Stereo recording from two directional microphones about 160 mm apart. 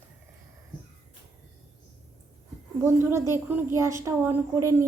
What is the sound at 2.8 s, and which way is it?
A woman's voice, 15° right (ahead or behind).